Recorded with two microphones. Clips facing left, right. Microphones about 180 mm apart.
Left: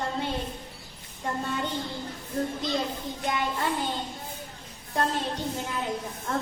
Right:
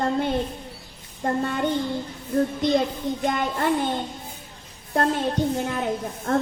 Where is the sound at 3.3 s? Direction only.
50° right (ahead or behind).